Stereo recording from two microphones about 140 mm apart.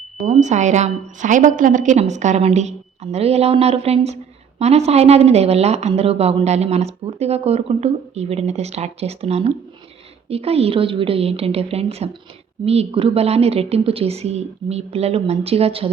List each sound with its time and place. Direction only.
0.3 s a woman's voice: 60° right (ahead or behind)